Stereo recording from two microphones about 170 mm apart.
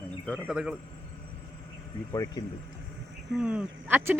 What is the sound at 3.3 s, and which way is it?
Speech, 5° right (ahead or behind).